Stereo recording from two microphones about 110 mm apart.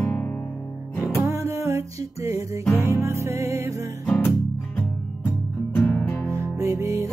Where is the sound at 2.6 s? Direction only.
25° left (ahead or behind).